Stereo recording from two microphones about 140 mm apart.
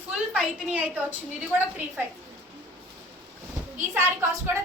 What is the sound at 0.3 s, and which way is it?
Speech, 10° right (ahead or behind).